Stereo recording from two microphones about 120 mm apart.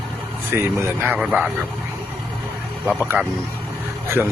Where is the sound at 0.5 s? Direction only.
20° right (ahead or behind).